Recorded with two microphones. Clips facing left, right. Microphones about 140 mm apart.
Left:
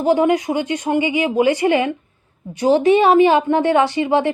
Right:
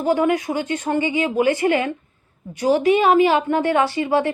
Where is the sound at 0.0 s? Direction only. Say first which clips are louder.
Left 3 dB; 20° left (ahead or behind).